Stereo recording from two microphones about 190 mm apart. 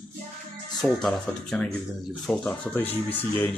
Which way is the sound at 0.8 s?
Centre (ahead or behind).